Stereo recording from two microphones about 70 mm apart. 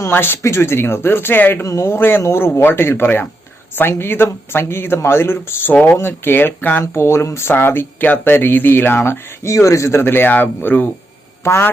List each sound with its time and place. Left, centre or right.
0.1 s speech: left
1.6 s speech: left
6.9 s speech: left
9.5 s speech: left
11.4 s speech: left